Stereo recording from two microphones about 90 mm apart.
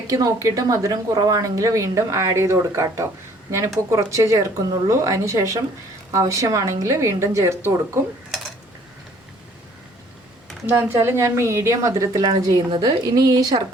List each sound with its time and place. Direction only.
0.1 s speech: 40° right (ahead or behind)
10.7 s speech: 25° right (ahead or behind)
12.2 s speech: 50° right (ahead or behind)